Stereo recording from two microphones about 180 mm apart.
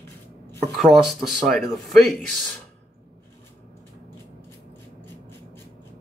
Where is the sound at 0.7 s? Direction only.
Centre (ahead or behind).